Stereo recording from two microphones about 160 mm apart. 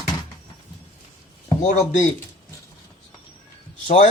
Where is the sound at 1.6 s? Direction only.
50° left (ahead or behind).